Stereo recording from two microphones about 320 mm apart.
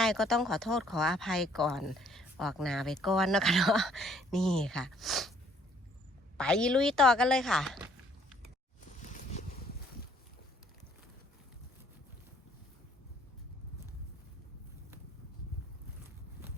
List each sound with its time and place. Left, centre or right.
0.0 s speech: centre
6.3 s speech: centre
9.0 s a sound: left